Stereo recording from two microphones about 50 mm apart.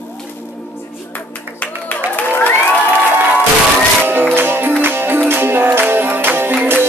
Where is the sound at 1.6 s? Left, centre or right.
Left.